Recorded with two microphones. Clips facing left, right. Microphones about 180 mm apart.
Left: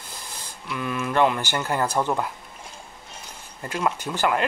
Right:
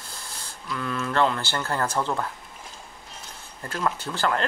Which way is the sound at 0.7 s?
15° left (ahead or behind).